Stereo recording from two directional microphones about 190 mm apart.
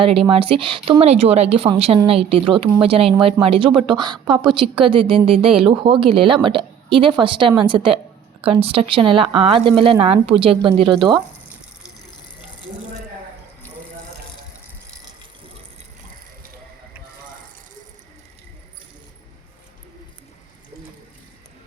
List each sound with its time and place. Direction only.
0.0 s a woman's voice: 30° right (ahead or behind)